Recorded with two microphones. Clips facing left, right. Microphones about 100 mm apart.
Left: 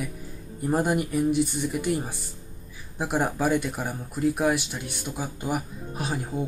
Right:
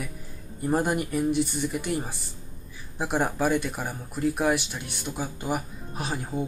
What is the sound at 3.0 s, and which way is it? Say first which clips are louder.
Speech: even; 5° left (ahead or behind).